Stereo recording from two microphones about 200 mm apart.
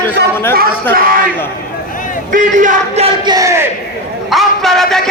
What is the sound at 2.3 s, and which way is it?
A man's voice, 40° right (ahead or behind).